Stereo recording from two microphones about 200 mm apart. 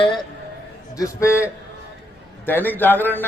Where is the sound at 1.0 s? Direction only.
15° left (ahead or behind).